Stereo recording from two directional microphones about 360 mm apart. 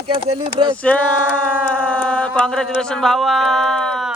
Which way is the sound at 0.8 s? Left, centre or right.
Centre.